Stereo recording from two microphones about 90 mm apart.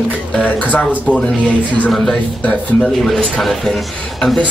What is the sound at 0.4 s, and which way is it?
Speech, 15° left (ahead or behind).